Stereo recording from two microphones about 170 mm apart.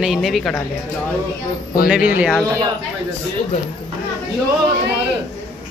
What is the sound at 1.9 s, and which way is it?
Speech, 10° right (ahead or behind).